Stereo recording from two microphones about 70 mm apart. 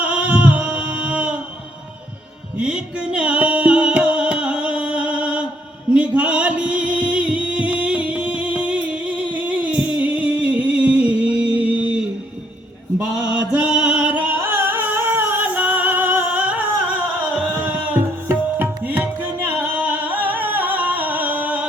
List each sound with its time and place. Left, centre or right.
0.0 s a sound: centre
2.6 s music: centre
13.0 s music: centre
18.3 s tabla: right